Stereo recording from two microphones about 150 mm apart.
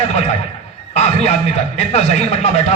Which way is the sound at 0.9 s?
45° left (ahead or behind).